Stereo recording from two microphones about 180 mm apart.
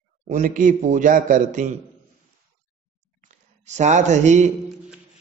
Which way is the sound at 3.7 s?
40° right (ahead or behind).